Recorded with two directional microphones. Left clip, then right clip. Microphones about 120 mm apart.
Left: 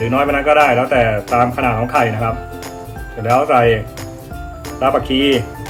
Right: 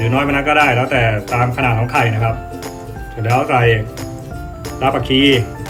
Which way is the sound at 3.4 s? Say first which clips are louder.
Left 1 dB; 65° left (ahead or behind).